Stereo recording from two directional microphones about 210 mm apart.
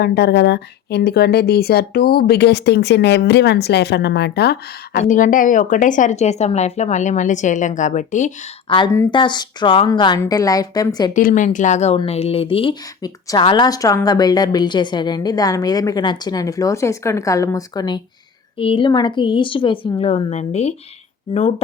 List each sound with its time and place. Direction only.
0.0 s speech: 50° left (ahead or behind)
4.9 s speech: 40° left (ahead or behind)
8.7 s a woman's voice: 15° left (ahead or behind)
11.1 s a woman's voice: 40° left (ahead or behind)